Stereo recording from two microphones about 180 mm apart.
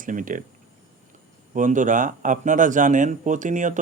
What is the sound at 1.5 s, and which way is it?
Speech, 45° right (ahead or behind).